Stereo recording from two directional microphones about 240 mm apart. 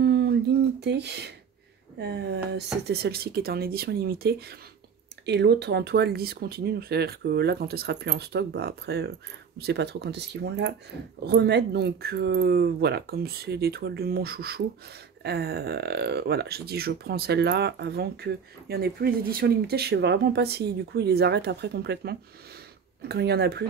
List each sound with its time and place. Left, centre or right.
0.0 s speech: right